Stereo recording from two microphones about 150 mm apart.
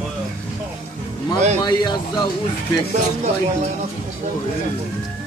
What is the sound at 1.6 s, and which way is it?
Speech, 25° left (ahead or behind).